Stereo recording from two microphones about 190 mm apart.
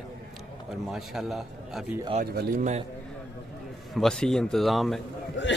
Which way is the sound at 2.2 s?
40° right (ahead or behind).